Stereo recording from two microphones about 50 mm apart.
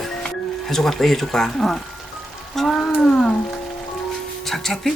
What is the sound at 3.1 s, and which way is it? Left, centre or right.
Music, left.